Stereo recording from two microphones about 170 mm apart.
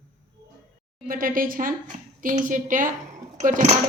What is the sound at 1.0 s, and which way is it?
A woman's voice, 55° right (ahead or behind).